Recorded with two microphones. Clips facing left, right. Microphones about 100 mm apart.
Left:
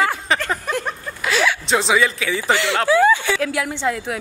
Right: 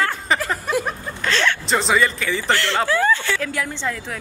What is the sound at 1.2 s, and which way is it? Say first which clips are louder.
Speech: left 1 dB; 5° left (ahead or behind).